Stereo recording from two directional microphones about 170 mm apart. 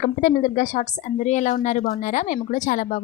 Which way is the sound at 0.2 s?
45° left (ahead or behind).